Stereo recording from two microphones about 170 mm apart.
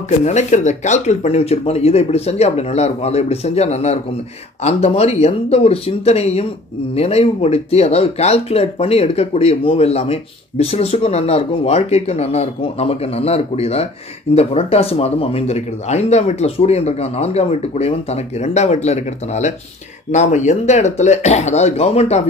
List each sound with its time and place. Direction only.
0.2 s speech: 45° left (ahead or behind)